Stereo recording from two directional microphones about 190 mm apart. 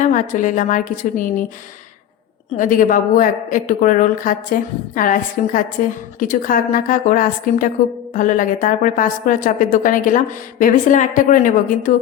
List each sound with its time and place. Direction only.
0.0 s a woman's voice: 40° left (ahead or behind)
2.6 s a woman's voice: 45° left (ahead or behind)